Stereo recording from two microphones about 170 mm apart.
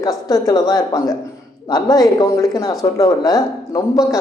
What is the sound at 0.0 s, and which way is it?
Speech, 20° left (ahead or behind).